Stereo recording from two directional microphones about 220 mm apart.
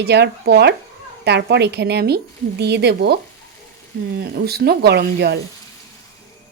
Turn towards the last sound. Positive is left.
turn(degrees=-50)  # may be behind; listen again after turning